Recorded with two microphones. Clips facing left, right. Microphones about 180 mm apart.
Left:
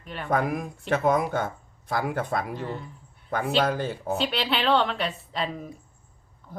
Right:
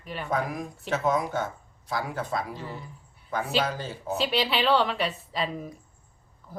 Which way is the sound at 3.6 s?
55° left (ahead or behind).